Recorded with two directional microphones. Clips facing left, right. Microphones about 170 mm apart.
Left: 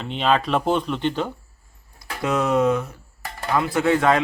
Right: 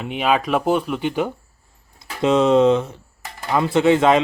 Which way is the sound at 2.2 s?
25° right (ahead or behind).